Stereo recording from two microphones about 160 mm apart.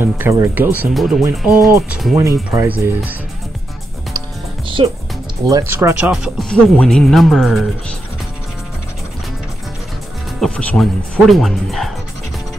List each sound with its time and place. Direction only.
0.0 s speech: 15° right (ahead or behind)
2.5 s speech: 15° right (ahead or behind)
4.6 s music: 35° right (ahead or behind)
5.4 s speech: 20° right (ahead or behind)
6.5 s speech: 5° left (ahead or behind)
10.4 s speech: 5° left (ahead or behind)